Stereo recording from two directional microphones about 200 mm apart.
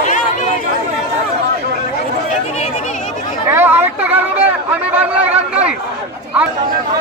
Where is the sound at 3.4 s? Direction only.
10° right (ahead or behind).